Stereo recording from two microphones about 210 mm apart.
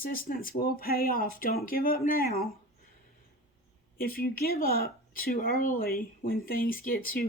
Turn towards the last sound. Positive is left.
turn(degrees=45)  # may be behind; listen again after turning